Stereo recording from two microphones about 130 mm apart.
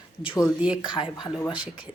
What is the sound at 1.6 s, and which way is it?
Speech, 10° right (ahead or behind).